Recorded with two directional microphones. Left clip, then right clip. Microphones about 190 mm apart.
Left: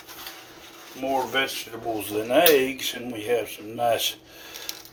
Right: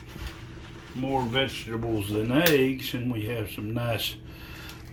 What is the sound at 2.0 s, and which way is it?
Speech, 45° left (ahead or behind).